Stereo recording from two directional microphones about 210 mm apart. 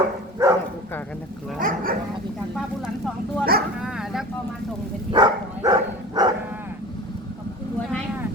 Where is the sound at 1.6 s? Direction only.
40° right (ahead or behind).